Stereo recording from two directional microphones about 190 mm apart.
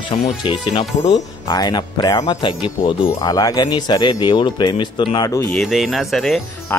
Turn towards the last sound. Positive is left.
turn(degrees=0)  # may be behind; listen again after turning